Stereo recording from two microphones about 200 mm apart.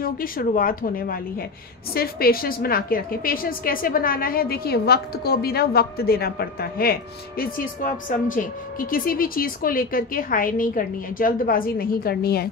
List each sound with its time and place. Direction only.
0.0 s a woman's voice: 45° left (ahead or behind)